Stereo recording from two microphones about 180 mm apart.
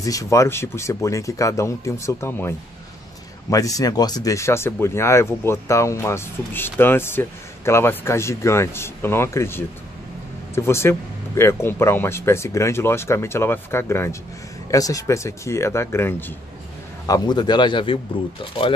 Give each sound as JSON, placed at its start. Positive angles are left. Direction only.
{"t": 0.0, "sound": "a man's voice", "side_deg": 20}